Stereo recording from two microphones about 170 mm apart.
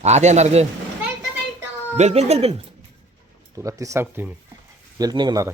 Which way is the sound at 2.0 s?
40° right (ahead or behind).